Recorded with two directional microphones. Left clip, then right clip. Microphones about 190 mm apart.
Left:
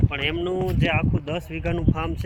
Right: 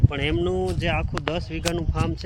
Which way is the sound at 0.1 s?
5° right (ahead or behind).